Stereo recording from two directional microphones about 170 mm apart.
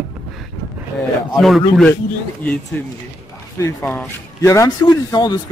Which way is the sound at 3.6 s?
15° left (ahead or behind).